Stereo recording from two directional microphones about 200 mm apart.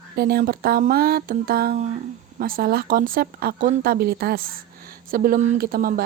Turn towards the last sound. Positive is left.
turn(degrees=-50)  # may be behind; listen again after turning